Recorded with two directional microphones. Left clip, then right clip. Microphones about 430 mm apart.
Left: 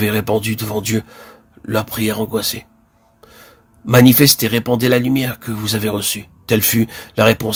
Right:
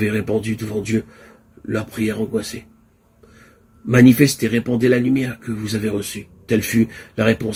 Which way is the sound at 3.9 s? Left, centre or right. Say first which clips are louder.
Left 3 dB; left.